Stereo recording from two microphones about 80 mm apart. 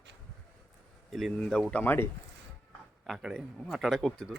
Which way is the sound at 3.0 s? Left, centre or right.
Centre.